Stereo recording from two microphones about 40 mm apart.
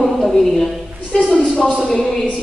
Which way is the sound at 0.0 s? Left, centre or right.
Centre.